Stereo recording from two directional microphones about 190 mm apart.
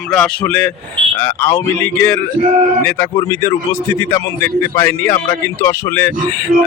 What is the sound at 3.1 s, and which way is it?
Speech, 15° left (ahead or behind).